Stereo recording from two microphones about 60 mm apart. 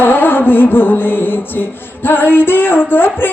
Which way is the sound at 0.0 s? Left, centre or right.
Left.